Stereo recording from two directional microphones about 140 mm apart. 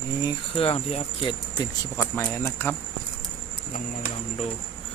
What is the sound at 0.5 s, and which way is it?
Speech, 45° left (ahead or behind).